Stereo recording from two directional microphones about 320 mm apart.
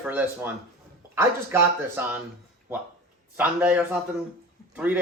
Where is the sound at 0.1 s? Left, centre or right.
Centre.